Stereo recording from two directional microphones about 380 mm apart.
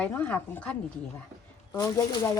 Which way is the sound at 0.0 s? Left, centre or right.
Centre.